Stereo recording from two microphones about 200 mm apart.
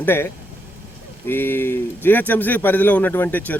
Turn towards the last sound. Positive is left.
turn(degrees=10)  # may be behind; listen again after turning